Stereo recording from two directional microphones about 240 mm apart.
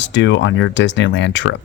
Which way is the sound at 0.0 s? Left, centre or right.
Left.